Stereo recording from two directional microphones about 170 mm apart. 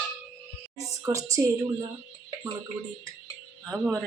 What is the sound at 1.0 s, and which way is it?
Speech, 20° right (ahead or behind).